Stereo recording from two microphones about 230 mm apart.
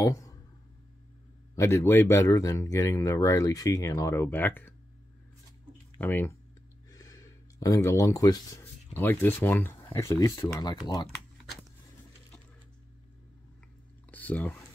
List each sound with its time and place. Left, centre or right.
0.0 s a sound: centre
1.5 s speech: centre
5.9 s speech: centre
14.1 s speech: centre